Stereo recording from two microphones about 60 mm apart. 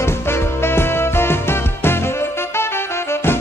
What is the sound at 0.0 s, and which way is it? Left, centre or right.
Music, left.